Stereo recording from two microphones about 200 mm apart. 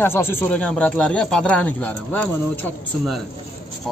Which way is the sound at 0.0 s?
10° left (ahead or behind).